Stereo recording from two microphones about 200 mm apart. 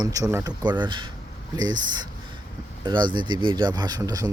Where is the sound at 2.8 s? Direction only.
20° right (ahead or behind).